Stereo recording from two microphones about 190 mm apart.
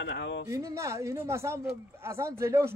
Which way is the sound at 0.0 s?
70° left (ahead or behind).